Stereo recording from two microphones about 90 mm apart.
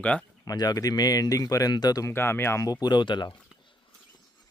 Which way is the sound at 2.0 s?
25° left (ahead or behind).